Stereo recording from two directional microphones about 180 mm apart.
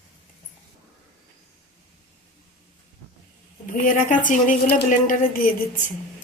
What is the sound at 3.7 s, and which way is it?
A woman's voice, 45° left (ahead or behind).